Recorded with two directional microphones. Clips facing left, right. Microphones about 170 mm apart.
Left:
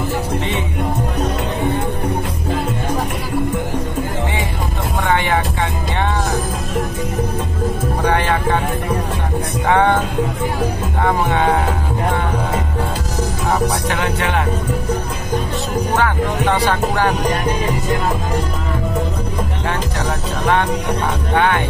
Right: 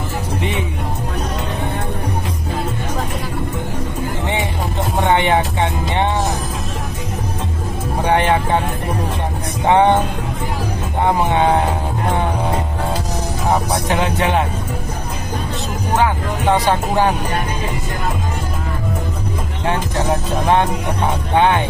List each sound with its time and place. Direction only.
5.0 s music: 20° right (ahead or behind)
8.1 s music: 20° right (ahead or behind)
9.7 s music: 20° right (ahead or behind)
13.5 s music: 15° right (ahead or behind)
16.0 s music: 15° right (ahead or behind)
21.4 s music: 20° right (ahead or behind)